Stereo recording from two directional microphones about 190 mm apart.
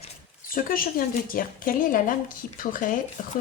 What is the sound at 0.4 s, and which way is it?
A woman's voice, 50° left (ahead or behind).